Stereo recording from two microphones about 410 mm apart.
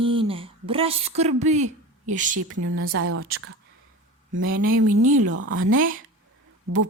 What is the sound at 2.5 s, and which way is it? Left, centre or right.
Speech, right.